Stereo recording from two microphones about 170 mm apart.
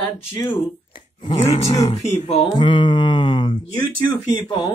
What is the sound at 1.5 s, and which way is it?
Speech, 40° left (ahead or behind).